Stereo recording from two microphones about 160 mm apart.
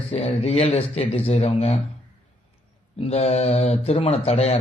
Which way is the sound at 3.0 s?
40° left (ahead or behind).